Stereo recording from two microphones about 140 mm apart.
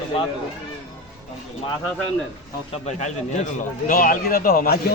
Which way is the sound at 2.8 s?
60° left (ahead or behind).